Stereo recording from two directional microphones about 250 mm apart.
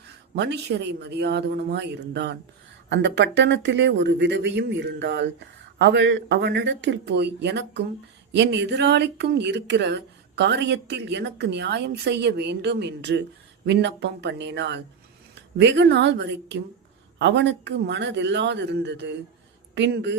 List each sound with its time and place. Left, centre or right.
0.3 s speech: right